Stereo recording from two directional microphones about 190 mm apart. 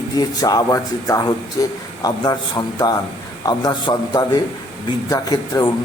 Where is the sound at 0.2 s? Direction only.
20° left (ahead or behind).